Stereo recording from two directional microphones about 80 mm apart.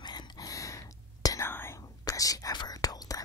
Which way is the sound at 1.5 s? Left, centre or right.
Left.